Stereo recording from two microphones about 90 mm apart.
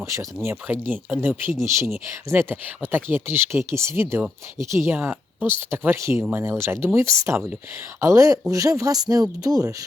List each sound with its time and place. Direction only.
0.0 s speech: 30° right (ahead or behind)
0.4 s speech: 20° right (ahead or behind)
1.6 s speech: 35° right (ahead or behind)